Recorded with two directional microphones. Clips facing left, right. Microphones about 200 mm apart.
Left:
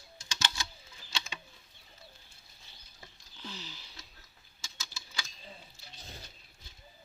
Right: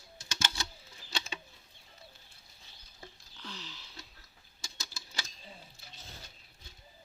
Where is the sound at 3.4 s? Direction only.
Centre (ahead or behind).